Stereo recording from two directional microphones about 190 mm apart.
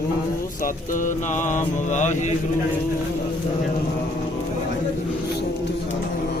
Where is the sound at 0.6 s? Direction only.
40° left (ahead or behind).